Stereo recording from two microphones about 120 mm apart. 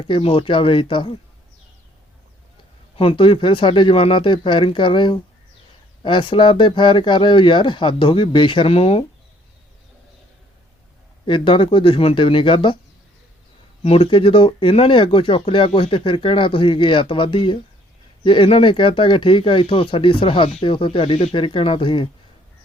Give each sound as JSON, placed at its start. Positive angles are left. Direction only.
{"t": 0.0, "sound": "speech", "side_deg": 50}
{"t": 2.9, "sound": "speech", "side_deg": 50}
{"t": 11.3, "sound": "speech", "side_deg": 45}
{"t": 13.8, "sound": "speech", "side_deg": 50}